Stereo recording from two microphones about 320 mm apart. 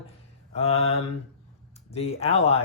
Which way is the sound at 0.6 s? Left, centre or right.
Centre.